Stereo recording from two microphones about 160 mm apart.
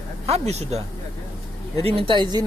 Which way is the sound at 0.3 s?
40° right (ahead or behind).